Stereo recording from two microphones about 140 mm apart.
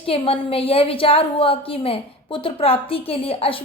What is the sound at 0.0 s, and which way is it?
A woman's voice, 40° left (ahead or behind).